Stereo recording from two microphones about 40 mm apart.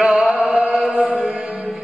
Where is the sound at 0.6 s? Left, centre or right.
Right.